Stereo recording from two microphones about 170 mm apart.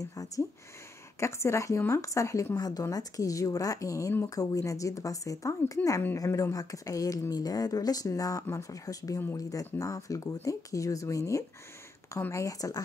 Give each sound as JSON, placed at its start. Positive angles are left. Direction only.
{"t": 0.0, "sound": "speech", "side_deg": 20}